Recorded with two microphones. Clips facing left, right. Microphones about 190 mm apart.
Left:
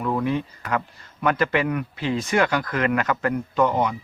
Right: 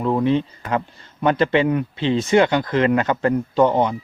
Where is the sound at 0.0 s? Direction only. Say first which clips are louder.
Right 5 dB; 25° right (ahead or behind).